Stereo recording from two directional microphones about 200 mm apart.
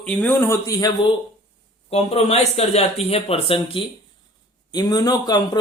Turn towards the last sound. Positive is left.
turn(degrees=20)  # may be behind; listen again after turning